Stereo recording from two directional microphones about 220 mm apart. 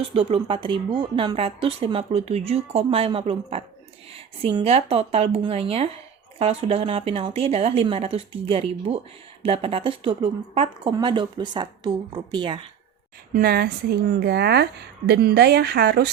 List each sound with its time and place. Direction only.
0.1 s speech: 25° right (ahead or behind)
13.3 s a woman's voice: 45° right (ahead or behind)